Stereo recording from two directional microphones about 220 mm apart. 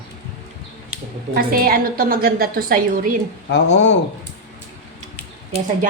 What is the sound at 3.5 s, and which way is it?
Speech, 55° left (ahead or behind).